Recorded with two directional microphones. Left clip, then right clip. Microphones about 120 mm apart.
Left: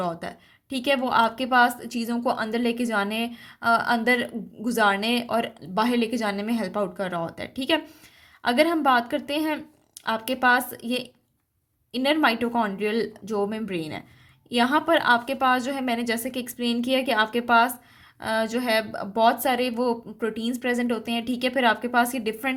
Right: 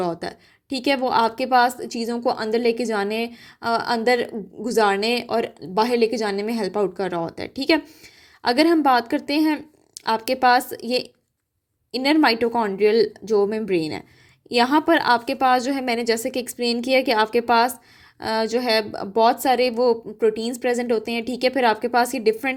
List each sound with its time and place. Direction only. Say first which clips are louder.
0.0 s a woman's voice: right 4 dB; 45° right (ahead or behind)